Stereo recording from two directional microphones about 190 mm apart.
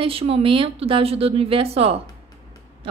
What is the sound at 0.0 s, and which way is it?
Speech, 30° right (ahead or behind).